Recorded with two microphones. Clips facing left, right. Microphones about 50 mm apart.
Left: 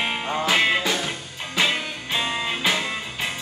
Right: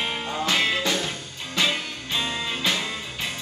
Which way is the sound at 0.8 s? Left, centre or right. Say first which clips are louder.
Left 1 dB; centre.